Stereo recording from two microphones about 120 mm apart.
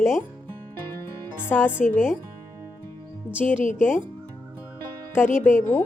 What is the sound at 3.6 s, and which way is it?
Speech, 90° left.